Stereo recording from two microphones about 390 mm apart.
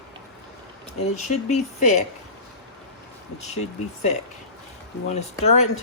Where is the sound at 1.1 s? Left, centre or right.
Centre.